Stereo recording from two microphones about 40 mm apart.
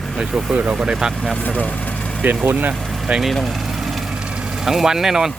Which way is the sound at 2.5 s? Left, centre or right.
Right.